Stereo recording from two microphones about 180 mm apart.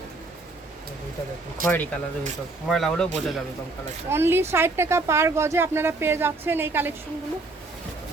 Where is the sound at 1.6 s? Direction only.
50° right (ahead or behind).